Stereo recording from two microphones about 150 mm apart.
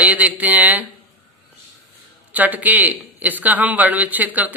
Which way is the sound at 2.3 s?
10° right (ahead or behind).